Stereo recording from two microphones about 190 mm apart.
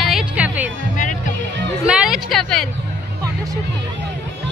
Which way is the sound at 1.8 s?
5° right (ahead or behind).